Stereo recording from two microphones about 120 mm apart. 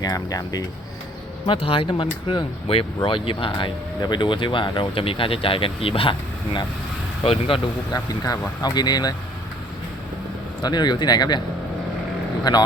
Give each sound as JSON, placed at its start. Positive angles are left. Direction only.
{"t": 0.0, "sound": "speech", "side_deg": 30}
{"t": 1.5, "sound": "speech", "side_deg": 50}
{"t": 7.9, "sound": "speech", "side_deg": 30}
{"t": 10.6, "sound": "speech", "side_deg": 35}
{"t": 12.5, "sound": "speech", "side_deg": 35}